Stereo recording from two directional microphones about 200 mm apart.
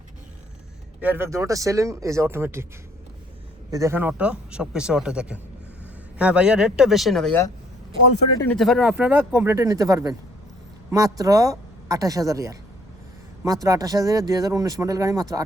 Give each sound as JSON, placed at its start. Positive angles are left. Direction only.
{"t": 1.0, "sound": "speech", "side_deg": -10}
{"t": 3.7, "sound": "speech", "side_deg": -15}
{"t": 8.4, "sound": "speech", "side_deg": 5}